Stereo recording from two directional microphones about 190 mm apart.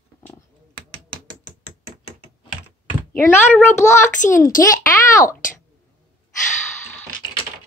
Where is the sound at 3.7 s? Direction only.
15° left (ahead or behind).